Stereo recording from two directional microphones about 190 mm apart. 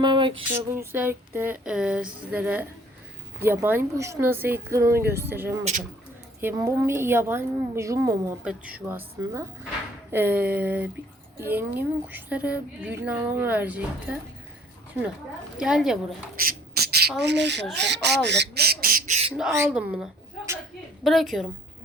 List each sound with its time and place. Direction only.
0.0 s a sound: 25° right (ahead or behind)
0.4 s a woman's voice: 10° right (ahead or behind)
15.5 s speech: 5° right (ahead or behind)
16.3 s speech: 50° right (ahead or behind)
19.5 s a woman's voice: 10° right (ahead or behind)